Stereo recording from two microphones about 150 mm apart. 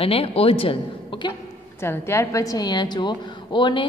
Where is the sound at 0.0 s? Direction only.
40° left (ahead or behind).